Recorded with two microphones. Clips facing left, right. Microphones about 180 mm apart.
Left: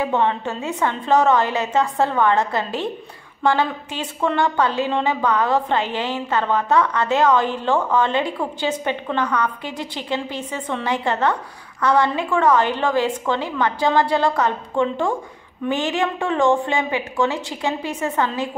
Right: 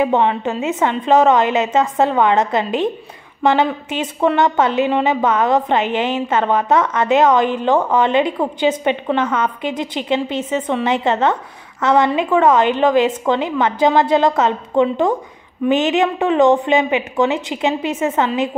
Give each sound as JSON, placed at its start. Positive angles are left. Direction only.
{"t": 0.0, "sound": "a woman's voice", "side_deg": -15}